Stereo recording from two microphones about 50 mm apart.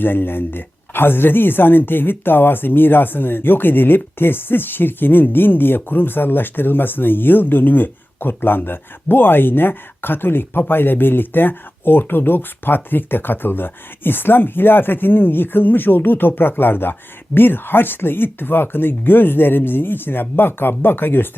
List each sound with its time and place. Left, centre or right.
0.0 s speech: left